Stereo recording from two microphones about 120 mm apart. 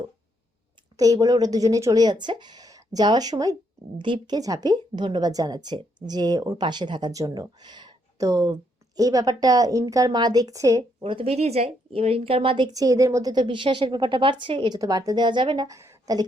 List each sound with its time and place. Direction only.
0.9 s a woman's voice: 30° right (ahead or behind)
4.4 s a woman's voice: 30° right (ahead or behind)
11.0 s a woman's voice: 50° right (ahead or behind)
14.8 s a woman's voice: 30° right (ahead or behind)
15.6 s a woman's voice: 25° right (ahead or behind)